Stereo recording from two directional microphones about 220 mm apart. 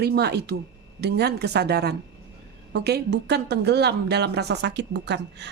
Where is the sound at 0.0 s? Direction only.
45° right (ahead or behind).